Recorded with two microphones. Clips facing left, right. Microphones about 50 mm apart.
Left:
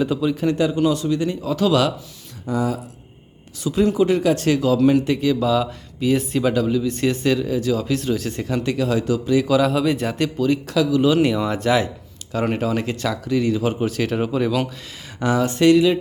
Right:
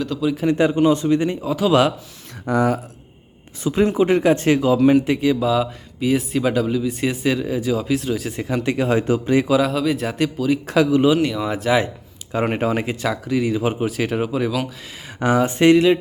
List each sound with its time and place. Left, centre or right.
0.2 s speech: centre
0.6 s speech: right
1.4 s speech: centre
2.5 s speech: right
3.6 s speech: right
9.5 s speech: centre
10.7 s speech: right
11.2 s speech: centre
11.4 s speech: centre
12.3 s speech: right; by 14.7 s centre
15.2 s speech: right